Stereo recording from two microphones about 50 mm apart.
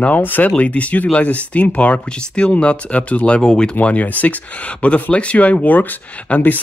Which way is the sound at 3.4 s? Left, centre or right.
Centre.